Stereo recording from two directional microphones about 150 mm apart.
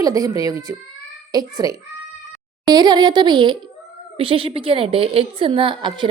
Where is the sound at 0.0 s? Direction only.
25° right (ahead or behind).